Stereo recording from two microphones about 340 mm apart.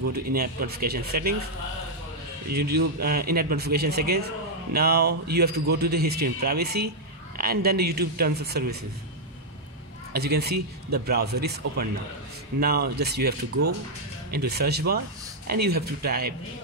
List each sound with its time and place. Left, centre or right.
0.1 s speech: right
2.5 s speech: right
10.1 s speech: right
14.3 s speech: right